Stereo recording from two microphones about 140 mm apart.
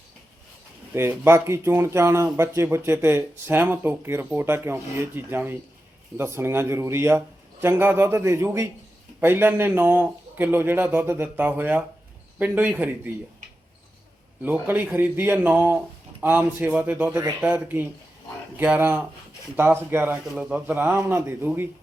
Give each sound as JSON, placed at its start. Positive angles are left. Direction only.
{"t": 0.9, "sound": "speech", "side_deg": -15}
{"t": 14.4, "sound": "speech", "side_deg": -10}